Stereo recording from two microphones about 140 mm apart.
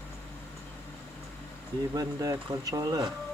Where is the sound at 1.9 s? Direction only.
25° right (ahead or behind).